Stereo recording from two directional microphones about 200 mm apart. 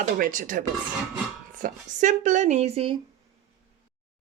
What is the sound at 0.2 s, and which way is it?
Speech, 40° right (ahead or behind).